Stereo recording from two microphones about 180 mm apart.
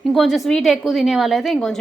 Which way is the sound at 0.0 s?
Centre (ahead or behind).